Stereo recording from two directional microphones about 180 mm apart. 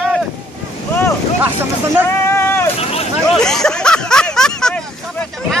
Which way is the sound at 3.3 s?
5° left (ahead or behind).